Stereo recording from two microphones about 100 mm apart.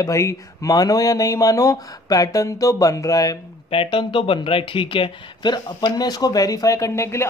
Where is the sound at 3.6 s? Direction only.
65° left (ahead or behind); by 7.3 s 30° left (ahead or behind).